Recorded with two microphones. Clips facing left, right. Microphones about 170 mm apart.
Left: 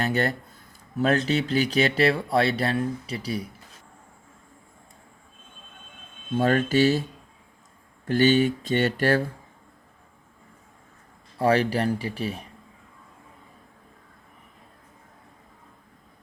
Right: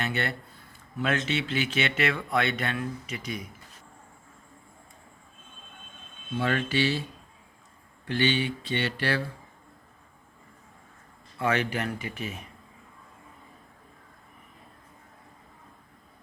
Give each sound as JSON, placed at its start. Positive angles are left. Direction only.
{"t": 0.0, "sound": "speech", "side_deg": 40}
{"t": 6.3, "sound": "speech", "side_deg": 45}
{"t": 8.0, "sound": "speech", "side_deg": 45}
{"t": 11.3, "sound": "speech", "side_deg": 35}